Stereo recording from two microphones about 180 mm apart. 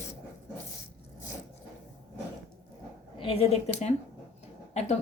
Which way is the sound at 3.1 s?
30° left (ahead or behind).